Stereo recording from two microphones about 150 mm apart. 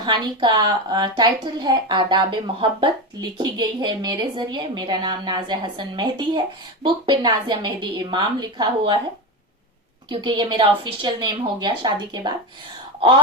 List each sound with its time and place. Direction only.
0.0 s a woman's voice: 30° right (ahead or behind)
10.1 s a woman's voice: 30° right (ahead or behind)